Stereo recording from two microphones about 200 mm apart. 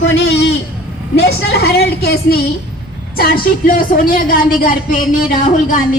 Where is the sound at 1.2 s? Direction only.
50° left (ahead or behind).